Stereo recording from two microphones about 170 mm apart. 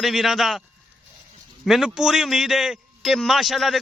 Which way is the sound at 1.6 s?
5° right (ahead or behind).